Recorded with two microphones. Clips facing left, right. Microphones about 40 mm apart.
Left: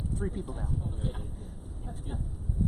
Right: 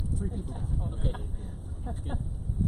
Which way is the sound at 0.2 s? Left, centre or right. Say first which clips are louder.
Left 4 dB; left.